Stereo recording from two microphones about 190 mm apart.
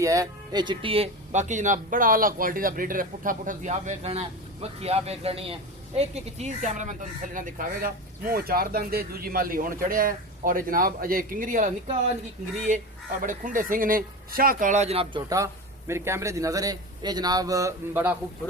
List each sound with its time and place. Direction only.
0.0 s speech: 15° right (ahead or behind)
15.9 s a man's voice: 15° right (ahead or behind)